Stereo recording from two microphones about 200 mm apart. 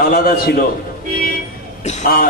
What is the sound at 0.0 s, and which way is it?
Speech, 45° left (ahead or behind).